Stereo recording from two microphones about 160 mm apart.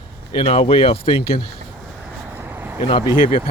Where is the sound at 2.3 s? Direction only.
15° right (ahead or behind).